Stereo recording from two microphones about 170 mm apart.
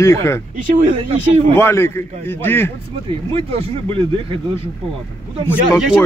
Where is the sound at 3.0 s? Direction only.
35° right (ahead or behind).